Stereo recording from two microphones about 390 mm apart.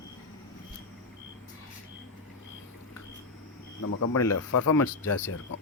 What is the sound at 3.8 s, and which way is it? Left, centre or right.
Speech, left.